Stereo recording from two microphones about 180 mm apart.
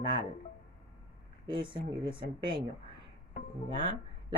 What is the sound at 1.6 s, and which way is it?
Speech, 25° right (ahead or behind).